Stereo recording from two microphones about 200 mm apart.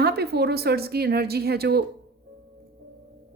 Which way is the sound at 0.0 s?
55° right (ahead or behind).